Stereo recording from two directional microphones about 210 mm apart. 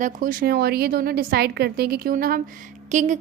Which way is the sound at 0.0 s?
40° right (ahead or behind).